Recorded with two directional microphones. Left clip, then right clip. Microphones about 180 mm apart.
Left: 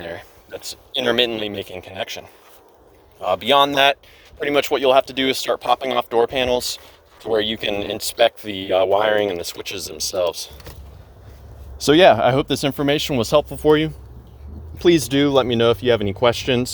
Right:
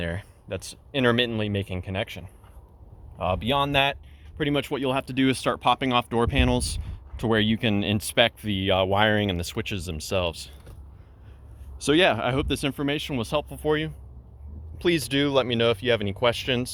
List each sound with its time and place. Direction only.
0.1 s speech: 25° left (ahead or behind)
3.2 s speech: 40° left (ahead or behind); by 10.5 s 20° left (ahead or behind)
11.8 s speech: 15° left (ahead or behind)